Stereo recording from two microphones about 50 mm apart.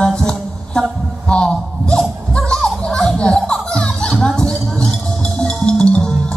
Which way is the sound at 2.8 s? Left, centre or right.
Centre.